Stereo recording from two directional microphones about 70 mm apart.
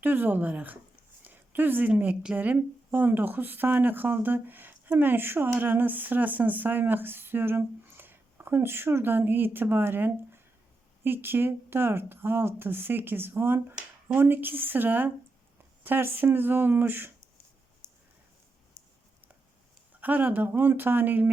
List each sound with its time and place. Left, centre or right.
0.0 s speech: right
1.2 s a sound: right
1.9 s speech: right
19.9 s speech: right